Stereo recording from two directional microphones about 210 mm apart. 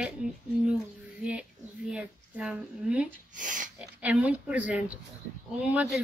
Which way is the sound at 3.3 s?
40° right (ahead or behind).